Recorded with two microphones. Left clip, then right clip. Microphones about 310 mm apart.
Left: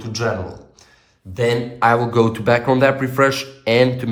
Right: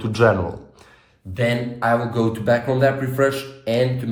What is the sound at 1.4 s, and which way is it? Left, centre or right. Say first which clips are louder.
Speech: left 4 dB; centre.